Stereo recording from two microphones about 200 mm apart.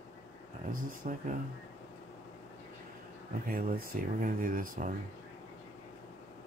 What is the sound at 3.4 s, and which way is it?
Speech, 45° right (ahead or behind).